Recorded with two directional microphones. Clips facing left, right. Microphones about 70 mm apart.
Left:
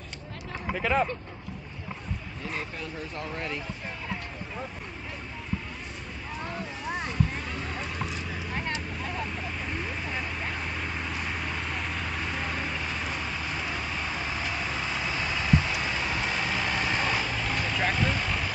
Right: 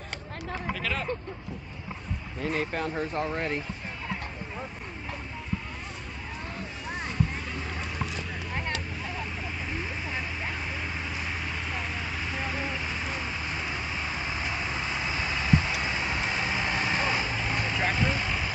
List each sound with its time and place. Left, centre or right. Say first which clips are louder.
0.7 s speech: left 11 dB; left
2.4 s speech: right 7 dB; right
2.9 s speech: right 6 dB; right
6.9 s vehicle: left 1 dB; centre